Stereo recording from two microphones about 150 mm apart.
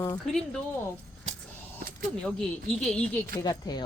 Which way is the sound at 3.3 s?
25° left (ahead or behind).